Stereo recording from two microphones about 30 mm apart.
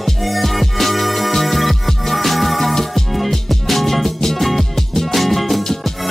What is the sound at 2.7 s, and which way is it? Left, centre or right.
Music, centre.